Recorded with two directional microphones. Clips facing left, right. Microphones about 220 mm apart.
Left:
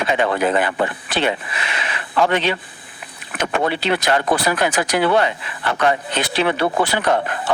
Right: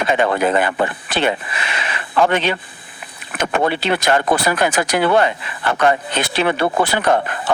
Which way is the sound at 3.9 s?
50° right (ahead or behind).